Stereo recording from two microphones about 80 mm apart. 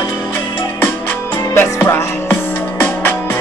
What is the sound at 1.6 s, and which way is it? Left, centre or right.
Music, left.